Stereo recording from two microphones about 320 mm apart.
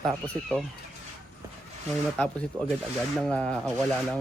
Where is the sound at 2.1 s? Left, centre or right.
Centre.